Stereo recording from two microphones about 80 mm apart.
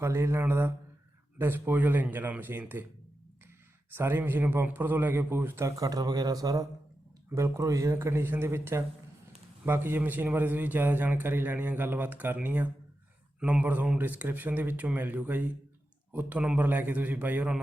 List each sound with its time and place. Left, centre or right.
0.0 s a man's voice: right
3.9 s a man's voice: right
5.6 s speech: right
7.3 s a man's voice: right; by 17.6 s centre